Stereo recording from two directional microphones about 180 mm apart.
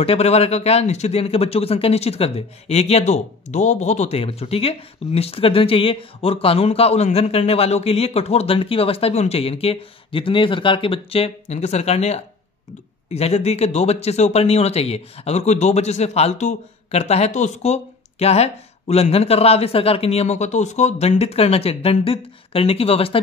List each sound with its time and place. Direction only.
0.0 s a man's voice: 35° left (ahead or behind)